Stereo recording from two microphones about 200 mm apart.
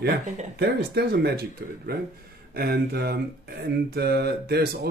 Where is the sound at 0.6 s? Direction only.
55° right (ahead or behind).